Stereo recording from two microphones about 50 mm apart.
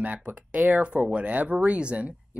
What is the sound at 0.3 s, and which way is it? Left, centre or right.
Speech, right.